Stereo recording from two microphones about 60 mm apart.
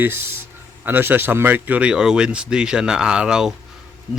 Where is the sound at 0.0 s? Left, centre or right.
Right.